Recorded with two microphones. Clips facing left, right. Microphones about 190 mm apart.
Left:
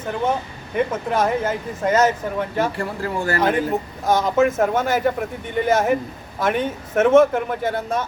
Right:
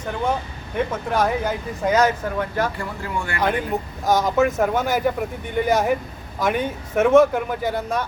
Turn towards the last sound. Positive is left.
turn(degrees=0)  # may be behind; listen again after turning